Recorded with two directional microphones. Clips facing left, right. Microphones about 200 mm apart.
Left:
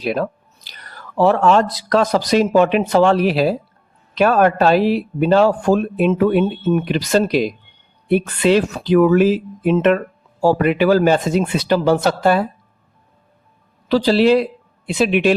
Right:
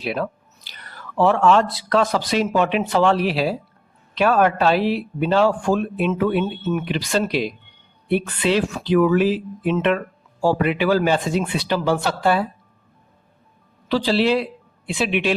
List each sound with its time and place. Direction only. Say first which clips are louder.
0.0 s speech: left 4 dB; 40° left (ahead or behind)
13.8 s speech: left 5 dB; 40° left (ahead or behind)